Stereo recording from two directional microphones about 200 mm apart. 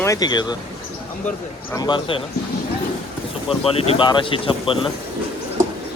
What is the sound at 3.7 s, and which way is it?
Speech, 30° left (ahead or behind).